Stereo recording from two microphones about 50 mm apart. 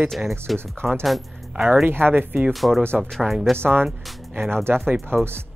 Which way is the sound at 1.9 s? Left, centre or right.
Right.